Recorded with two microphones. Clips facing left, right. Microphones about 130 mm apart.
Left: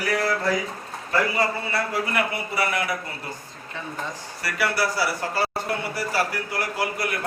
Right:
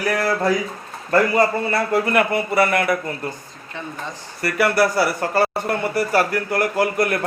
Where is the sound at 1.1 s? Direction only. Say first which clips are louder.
Right 7 dB; 50° right (ahead or behind).